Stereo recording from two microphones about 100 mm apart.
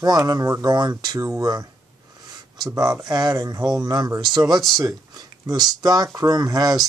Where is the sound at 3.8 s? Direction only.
40° right (ahead or behind).